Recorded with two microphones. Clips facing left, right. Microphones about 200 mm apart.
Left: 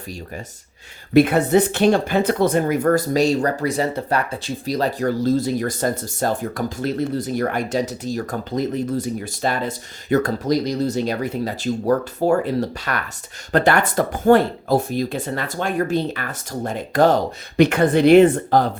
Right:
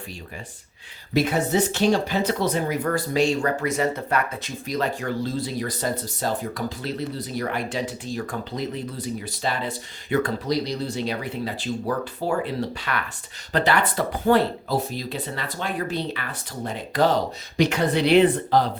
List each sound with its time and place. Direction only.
1.1 s speech: 55° left (ahead or behind)